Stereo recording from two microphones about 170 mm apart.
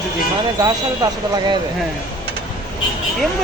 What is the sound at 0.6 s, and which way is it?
Speech, 20° right (ahead or behind).